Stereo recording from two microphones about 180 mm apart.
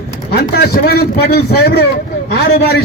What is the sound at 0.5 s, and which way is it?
A man's voice, 60° left (ahead or behind).